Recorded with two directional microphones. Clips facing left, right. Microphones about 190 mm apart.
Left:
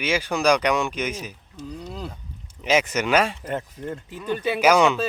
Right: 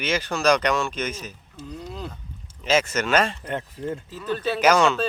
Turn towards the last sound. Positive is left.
turn(degrees=15)  # may be behind; listen again after turning